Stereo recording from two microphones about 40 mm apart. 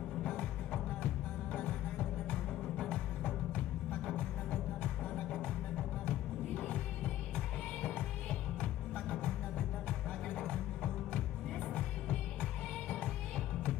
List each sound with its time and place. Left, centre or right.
0.3 s music: left
3.3 s music: left
4.0 s music: left
7.8 s music: left